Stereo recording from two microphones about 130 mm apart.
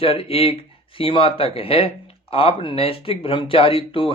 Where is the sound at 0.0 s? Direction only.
45° left (ahead or behind).